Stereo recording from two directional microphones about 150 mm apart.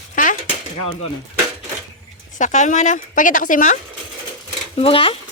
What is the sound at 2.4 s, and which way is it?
Speech, 55° left (ahead or behind).